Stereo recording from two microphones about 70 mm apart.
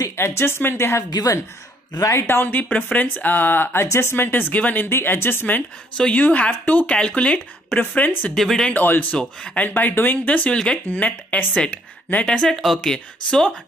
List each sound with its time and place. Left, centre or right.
0.2 s a woman's voice: left
1.1 s speech: left
2.2 s a woman's voice: left
5.9 s speech: centre
8.4 s speech: centre
8.6 s speech: left
9.1 s speech: centre
9.8 s speech: left
12.3 s speech: centre
12.5 s speech: centre
12.8 s speech: centre